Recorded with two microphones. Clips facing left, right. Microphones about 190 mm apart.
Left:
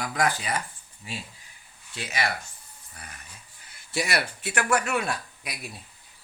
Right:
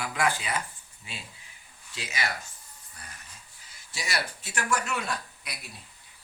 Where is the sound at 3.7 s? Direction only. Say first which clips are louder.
Left 7 dB; 60° left (ahead or behind).